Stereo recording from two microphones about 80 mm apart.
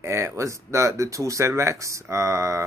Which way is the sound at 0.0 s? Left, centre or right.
Right.